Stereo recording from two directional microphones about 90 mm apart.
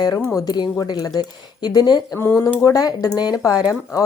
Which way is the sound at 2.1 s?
25° left (ahead or behind).